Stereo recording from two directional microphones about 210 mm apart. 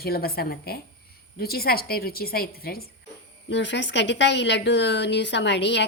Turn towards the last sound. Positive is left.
turn(degrees=55)  # may be behind; listen again after turning